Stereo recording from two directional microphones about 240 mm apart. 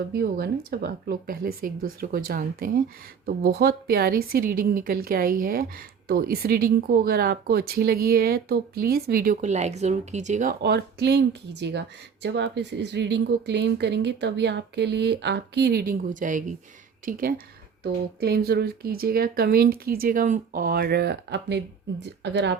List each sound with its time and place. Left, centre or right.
0.1 s a woman's voice: right